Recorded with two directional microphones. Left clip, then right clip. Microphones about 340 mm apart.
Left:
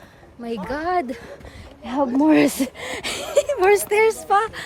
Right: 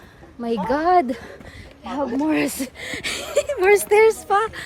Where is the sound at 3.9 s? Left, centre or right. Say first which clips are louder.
Right 2 dB; centre.